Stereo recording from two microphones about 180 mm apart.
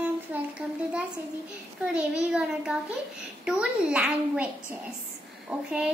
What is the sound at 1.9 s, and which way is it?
A child's voice, 5° right (ahead or behind).